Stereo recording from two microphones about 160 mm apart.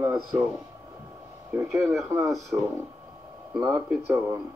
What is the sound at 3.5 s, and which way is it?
Speech, 10° right (ahead or behind).